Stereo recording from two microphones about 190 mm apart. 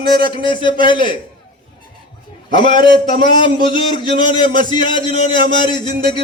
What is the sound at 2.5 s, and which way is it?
A man's voice, 25° left (ahead or behind).